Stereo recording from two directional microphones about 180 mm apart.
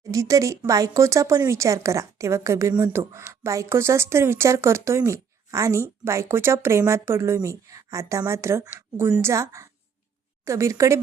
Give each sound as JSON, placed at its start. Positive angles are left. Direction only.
{"t": 0.1, "sound": "speech", "side_deg": -20}